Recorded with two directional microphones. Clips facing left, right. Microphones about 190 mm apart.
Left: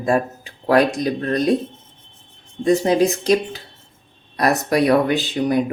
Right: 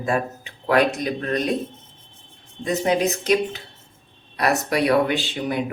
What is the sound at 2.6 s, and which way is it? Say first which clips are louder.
Speech: left 5 dB; 35° left (ahead or behind).